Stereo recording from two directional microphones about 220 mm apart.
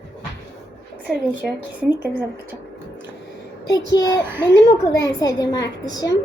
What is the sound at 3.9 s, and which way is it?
A child's voice, 15° left (ahead or behind).